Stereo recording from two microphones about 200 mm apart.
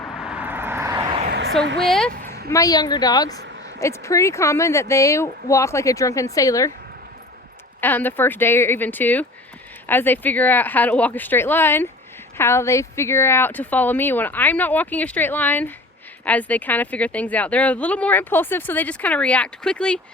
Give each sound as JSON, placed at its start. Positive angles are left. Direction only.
{"t": 0.2, "sound": "vehicle", "side_deg": -5}
{"t": 1.3, "sound": "a sound", "side_deg": -60}
{"t": 1.8, "sound": "speech", "side_deg": 0}
{"t": 2.5, "sound": "a woman's voice", "side_deg": 15}
{"t": 7.8, "sound": "a woman's voice", "side_deg": 10}